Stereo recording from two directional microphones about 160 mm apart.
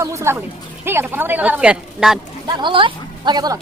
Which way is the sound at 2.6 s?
30° right (ahead or behind).